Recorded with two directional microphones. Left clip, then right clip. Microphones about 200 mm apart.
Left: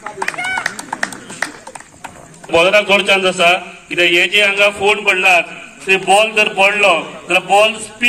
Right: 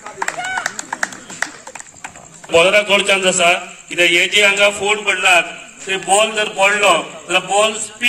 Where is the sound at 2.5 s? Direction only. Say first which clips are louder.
Left 1 dB; 35° left (ahead or behind).